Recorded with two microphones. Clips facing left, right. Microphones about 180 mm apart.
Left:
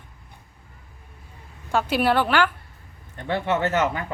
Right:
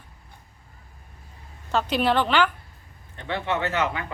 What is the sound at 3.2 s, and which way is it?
Speech, 45° left (ahead or behind).